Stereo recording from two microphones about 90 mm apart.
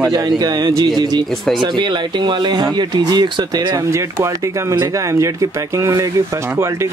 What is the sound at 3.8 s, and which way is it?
Speech, 35° right (ahead or behind).